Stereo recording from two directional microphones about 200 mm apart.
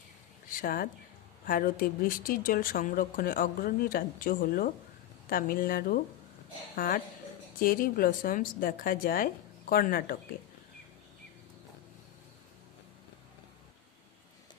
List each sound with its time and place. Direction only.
0.5 s speech: 45° left (ahead or behind)